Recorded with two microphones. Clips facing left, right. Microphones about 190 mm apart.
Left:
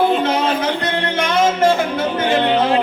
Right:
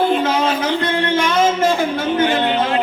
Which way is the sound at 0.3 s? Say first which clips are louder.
Even; 55° left (ahead or behind).